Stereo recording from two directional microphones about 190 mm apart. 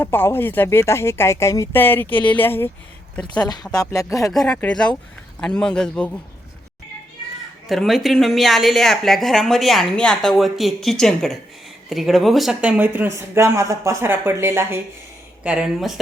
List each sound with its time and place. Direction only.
0.0 s speech: 10° left (ahead or behind)
3.2 s speech: 20° left (ahead or behind)
4.3 s speech: 5° left (ahead or behind)
7.7 s speech: centre (ahead or behind)